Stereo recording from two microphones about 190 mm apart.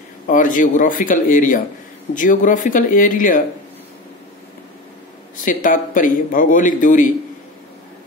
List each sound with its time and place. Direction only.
0.3 s speech: 45° left (ahead or behind)
5.4 s speech: 45° left (ahead or behind)